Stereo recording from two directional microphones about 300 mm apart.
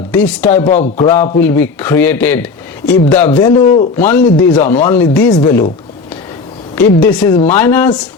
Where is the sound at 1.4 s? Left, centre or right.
Centre.